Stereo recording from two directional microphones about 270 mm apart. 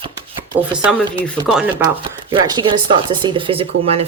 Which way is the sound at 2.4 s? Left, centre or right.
Centre.